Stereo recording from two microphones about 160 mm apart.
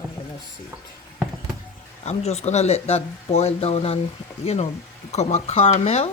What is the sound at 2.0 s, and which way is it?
Speech, 40° left (ahead or behind).